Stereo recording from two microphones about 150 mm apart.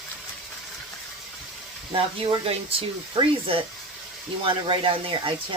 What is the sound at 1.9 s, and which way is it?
Speech, 40° right (ahead or behind).